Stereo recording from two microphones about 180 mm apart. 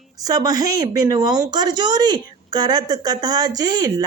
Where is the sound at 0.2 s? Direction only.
20° right (ahead or behind).